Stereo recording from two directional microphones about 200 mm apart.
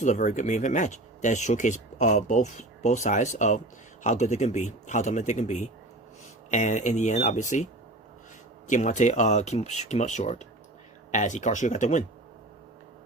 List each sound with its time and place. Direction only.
0.0 s speech: 35° left (ahead or behind)